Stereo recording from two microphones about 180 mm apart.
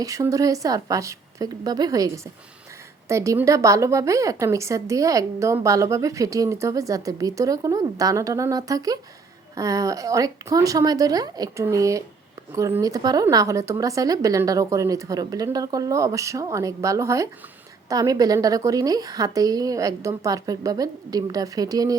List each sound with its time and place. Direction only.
0.0 s a woman's voice: 20° right (ahead or behind)